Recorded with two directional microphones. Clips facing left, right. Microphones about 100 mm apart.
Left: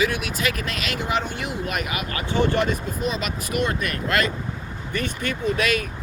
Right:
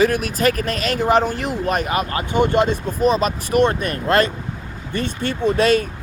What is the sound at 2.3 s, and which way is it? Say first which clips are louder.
Speech: right 4 dB; 20° right (ahead or behind).